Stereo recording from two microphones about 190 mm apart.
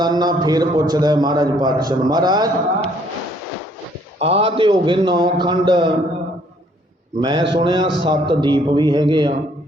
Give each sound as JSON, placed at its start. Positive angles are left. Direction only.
{"t": 0.0, "sound": "a man's voice", "side_deg": -20}
{"t": 4.2, "sound": "a man's voice", "side_deg": -30}
{"t": 7.2, "sound": "a man's voice", "side_deg": -25}